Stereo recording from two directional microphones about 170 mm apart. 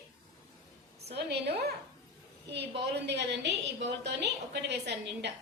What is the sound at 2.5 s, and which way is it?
A woman's voice, 90° right.